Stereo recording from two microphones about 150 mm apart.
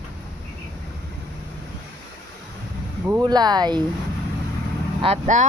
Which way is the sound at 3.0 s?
25° right (ahead or behind).